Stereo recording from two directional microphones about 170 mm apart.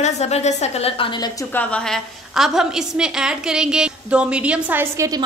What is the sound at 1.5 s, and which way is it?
A woman's voice, 5° left (ahead or behind).